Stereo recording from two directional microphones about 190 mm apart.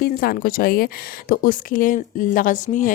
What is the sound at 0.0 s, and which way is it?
A woman's voice, 50° left (ahead or behind).